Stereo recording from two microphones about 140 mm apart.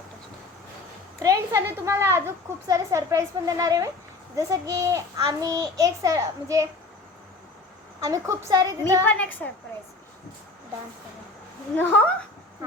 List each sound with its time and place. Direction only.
1.2 s speech: 25° right (ahead or behind)
8.0 s speech: 25° right (ahead or behind)
9.0 s a woman's voice: 10° left (ahead or behind)
11.8 s a woman's voice: 15° left (ahead or behind)